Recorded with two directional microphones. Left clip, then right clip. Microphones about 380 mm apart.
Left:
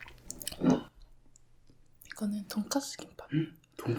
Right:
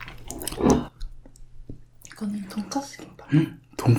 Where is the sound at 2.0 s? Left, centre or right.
Left.